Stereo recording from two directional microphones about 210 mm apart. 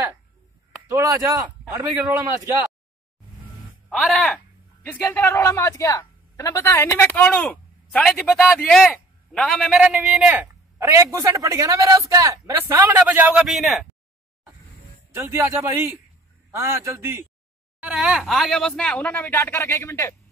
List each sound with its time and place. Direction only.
0.8 s a man's voice: 15° right (ahead or behind)
3.9 s speech: centre (ahead or behind)
15.1 s a man's voice: 10° right (ahead or behind); by 20.2 s 15° left (ahead or behind)